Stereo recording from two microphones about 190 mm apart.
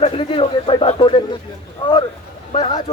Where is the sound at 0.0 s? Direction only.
30° left (ahead or behind).